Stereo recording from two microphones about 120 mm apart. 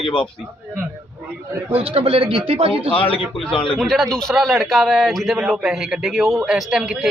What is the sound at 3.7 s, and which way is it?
A man's voice, centre (ahead or behind).